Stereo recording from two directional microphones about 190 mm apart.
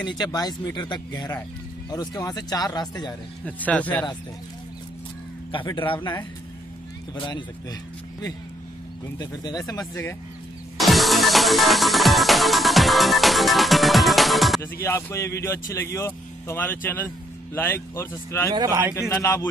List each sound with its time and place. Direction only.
0.2 s speech: 20° left (ahead or behind)
3.4 s speech: 10° left (ahead or behind)
5.5 s speech: 25° left (ahead or behind)
7.2 s speech: 25° left (ahead or behind)
9.2 s speech: 20° left (ahead or behind)
10.8 s music: centre (ahead or behind)
14.6 s speech: 15° left (ahead or behind)
18.5 s a man's voice: 20° right (ahead or behind)
19.1 s speech: 15° left (ahead or behind)